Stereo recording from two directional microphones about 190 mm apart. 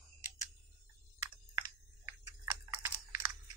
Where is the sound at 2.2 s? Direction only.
15° right (ahead or behind).